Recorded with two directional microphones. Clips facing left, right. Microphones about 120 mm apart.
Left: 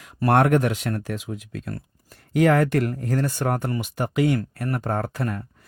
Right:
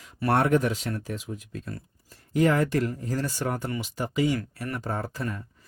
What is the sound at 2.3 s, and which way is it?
Speech, 70° left (ahead or behind).